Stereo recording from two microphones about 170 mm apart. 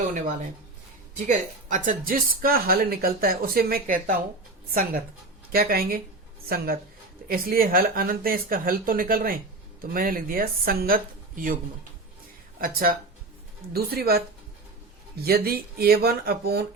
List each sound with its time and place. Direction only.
1.3 s speech: 50° right (ahead or behind)
7.3 s speech: 60° right (ahead or behind)
12.5 s speech: 60° right (ahead or behind)
15.2 s speech: 65° right (ahead or behind)